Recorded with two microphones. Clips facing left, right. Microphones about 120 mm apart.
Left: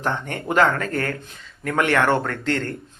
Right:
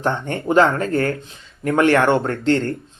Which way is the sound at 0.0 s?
30° right (ahead or behind).